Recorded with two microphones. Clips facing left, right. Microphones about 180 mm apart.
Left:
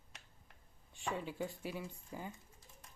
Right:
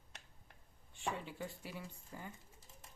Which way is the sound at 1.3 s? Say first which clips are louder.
Left 5 dB; 15° left (ahead or behind).